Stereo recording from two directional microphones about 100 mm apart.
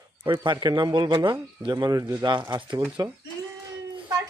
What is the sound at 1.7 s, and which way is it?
Speech, 35° right (ahead or behind).